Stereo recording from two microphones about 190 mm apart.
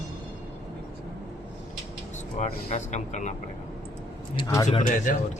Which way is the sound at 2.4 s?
35° left (ahead or behind).